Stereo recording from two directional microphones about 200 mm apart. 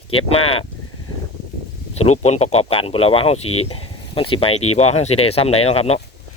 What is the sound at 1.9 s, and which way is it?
Speech, 30° left (ahead or behind).